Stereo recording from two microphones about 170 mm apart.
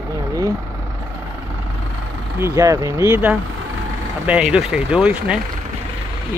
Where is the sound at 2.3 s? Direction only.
15° right (ahead or behind).